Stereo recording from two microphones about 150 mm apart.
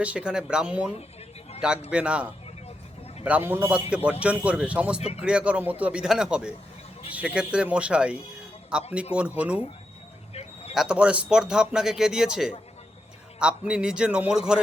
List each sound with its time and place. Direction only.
0.0 s a man's voice: 5° right (ahead or behind)
4.9 s speech: 45° left (ahead or behind)
5.2 s a man's voice: 5° right (ahead or behind)
10.8 s speech: 5° right (ahead or behind)